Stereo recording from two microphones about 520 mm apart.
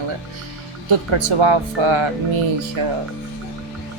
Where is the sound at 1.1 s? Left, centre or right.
Right.